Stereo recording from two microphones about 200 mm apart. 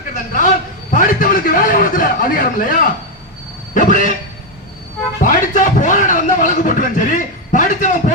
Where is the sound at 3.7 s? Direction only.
40° left (ahead or behind).